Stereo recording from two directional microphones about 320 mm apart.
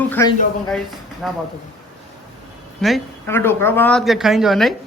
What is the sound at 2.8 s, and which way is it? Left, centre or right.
Speech, centre.